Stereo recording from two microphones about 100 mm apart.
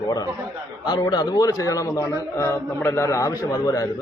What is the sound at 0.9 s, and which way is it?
A man's voice, 45° left (ahead or behind).